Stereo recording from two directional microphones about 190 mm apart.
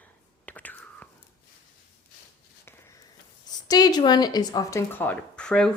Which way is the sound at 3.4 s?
20° left (ahead or behind).